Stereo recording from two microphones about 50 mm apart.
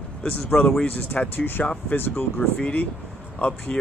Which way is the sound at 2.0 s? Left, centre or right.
Left.